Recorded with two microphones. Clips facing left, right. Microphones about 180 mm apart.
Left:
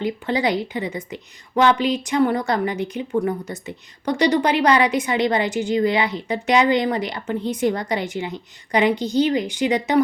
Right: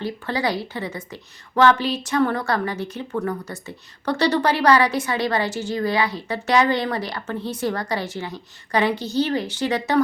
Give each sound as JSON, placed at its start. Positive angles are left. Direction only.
{"t": 0.0, "sound": "a woman's voice", "side_deg": 20}